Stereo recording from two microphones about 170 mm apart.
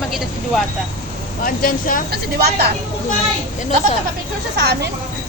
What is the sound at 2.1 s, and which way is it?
Speech, 70° right (ahead or behind).